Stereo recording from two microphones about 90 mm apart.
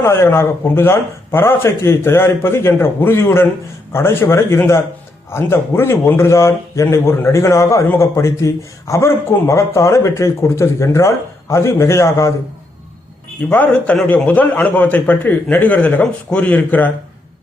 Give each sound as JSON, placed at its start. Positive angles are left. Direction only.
{"t": 0.0, "sound": "a man's voice", "side_deg": 25}
{"t": 13.5, "sound": "a man's voice", "side_deg": 15}